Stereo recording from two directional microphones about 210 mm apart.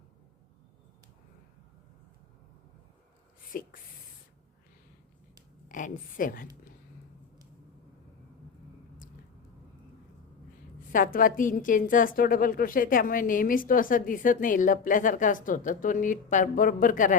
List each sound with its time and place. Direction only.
3.5 s a woman's voice: 40° left (ahead or behind)
5.6 s a woman's voice: 40° left (ahead or behind)
10.9 s a woman's voice: 40° left (ahead or behind)